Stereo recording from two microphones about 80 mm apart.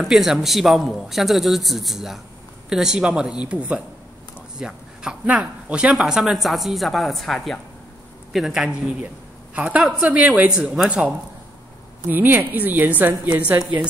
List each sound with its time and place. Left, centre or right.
0.0 s speech: centre
8.3 s speech: centre
12.1 s a woman's voice: right